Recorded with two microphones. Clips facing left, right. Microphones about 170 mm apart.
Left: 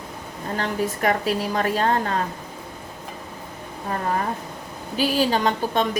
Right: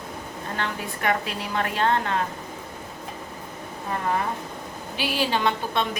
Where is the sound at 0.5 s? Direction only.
40° left (ahead or behind).